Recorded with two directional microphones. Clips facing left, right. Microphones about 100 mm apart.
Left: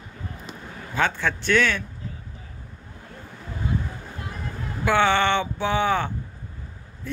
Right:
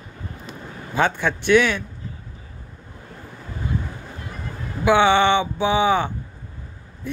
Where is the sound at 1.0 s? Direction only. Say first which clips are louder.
Right 3 dB; 15° right (ahead or behind).